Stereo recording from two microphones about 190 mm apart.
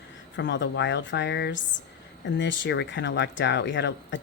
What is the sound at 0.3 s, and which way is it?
Speech, 70° left (ahead or behind).